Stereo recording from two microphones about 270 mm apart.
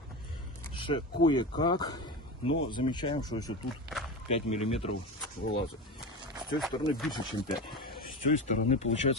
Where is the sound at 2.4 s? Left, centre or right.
Left.